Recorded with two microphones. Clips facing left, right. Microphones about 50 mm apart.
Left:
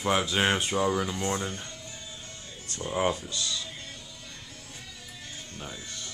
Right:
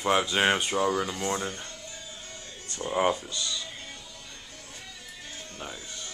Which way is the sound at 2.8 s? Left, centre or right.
Centre.